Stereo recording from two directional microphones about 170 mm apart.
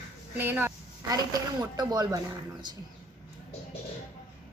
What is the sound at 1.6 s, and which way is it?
Speech, 25° right (ahead or behind).